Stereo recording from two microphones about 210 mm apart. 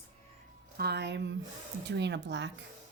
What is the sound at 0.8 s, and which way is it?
Speech, 50° right (ahead or behind).